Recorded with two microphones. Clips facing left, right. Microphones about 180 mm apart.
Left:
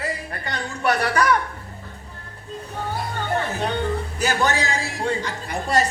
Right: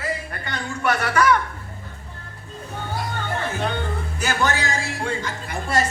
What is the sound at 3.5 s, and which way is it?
Speech, 35° left (ahead or behind).